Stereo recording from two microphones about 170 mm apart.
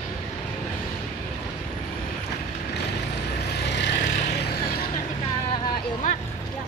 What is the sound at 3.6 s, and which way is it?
Vehicle, 85° left.